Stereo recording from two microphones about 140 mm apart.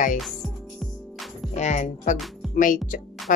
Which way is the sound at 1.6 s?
55° left (ahead or behind).